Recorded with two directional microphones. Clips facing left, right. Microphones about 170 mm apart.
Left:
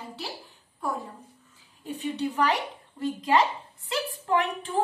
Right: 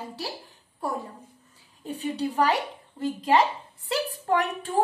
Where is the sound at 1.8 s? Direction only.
35° right (ahead or behind).